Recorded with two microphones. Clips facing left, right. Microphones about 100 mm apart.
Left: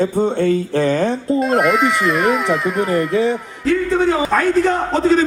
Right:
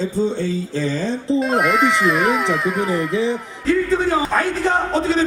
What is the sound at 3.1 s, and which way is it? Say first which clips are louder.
Speech: left 3 dB; 55° left (ahead or behind).